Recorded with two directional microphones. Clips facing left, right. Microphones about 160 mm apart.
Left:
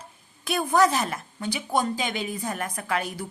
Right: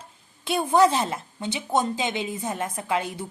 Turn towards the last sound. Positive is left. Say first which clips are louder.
# right 2 dB
turn(degrees=-20)  # may be behind; listen again after turning